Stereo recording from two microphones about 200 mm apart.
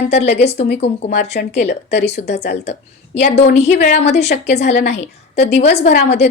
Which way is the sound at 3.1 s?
30° left (ahead or behind).